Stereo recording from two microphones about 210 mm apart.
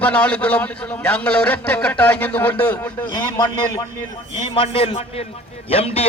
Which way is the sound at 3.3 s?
20° left (ahead or behind).